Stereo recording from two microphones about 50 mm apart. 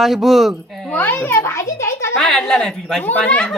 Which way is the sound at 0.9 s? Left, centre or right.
Left.